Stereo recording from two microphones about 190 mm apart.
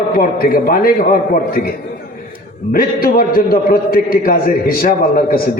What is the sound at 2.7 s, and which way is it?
A man's voice, 50° left (ahead or behind).